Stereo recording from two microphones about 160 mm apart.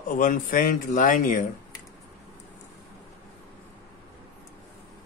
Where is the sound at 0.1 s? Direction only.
55° left (ahead or behind).